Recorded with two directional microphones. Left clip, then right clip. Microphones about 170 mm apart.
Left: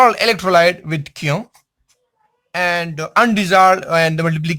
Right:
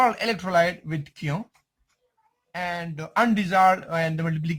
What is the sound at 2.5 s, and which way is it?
Speech, 50° left (ahead or behind).